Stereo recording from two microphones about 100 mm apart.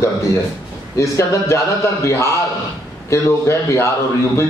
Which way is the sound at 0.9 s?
30° left (ahead or behind).